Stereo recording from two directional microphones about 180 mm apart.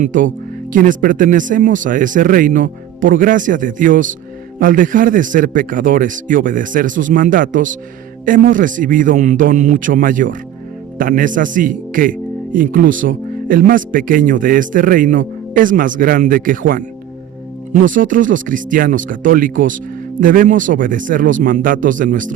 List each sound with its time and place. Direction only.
0.0 s speech: 45° right (ahead or behind)